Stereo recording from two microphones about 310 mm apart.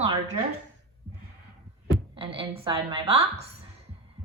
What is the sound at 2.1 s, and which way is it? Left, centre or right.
A woman's voice, centre.